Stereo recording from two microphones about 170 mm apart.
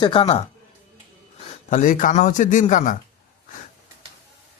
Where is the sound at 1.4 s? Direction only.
50° left (ahead or behind).